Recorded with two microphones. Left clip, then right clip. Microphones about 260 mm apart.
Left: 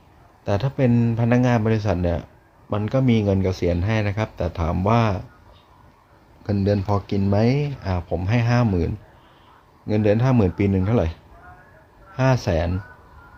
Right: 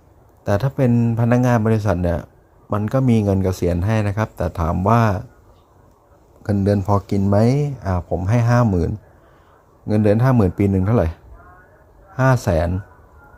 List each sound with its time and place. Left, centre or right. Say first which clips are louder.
0.4 s speech: right 3 dB; centre
6.4 s speech: right 3 dB; centre
12.1 s speech: right 3 dB; centre